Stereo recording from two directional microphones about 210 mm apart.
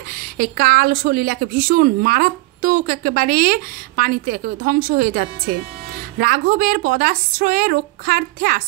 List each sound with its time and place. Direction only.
0.1 s speech: 45° right (ahead or behind)